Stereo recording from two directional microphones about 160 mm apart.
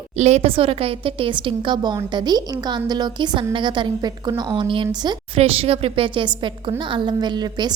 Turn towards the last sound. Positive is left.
turn(degrees=-25)  # may be behind; listen again after turning